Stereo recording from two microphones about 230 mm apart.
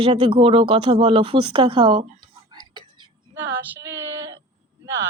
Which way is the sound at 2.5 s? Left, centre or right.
Centre.